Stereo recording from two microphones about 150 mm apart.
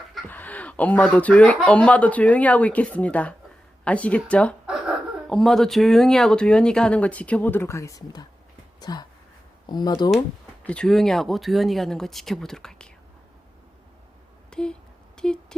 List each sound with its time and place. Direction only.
0.3 s speech: 10° left (ahead or behind); by 9.9 s 30° left (ahead or behind)
10.6 s speech: 10° left (ahead or behind)
14.5 s a sound: 5° left (ahead or behind)